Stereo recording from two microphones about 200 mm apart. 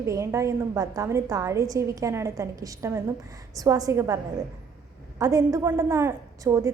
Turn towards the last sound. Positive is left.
turn(degrees=-15)  # may be behind; listen again after turning